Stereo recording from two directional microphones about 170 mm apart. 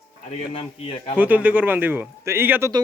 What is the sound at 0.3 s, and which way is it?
Speech, 35° left (ahead or behind).